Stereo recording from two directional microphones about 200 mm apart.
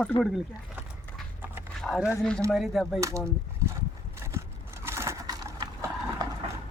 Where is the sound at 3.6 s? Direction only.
15° right (ahead or behind).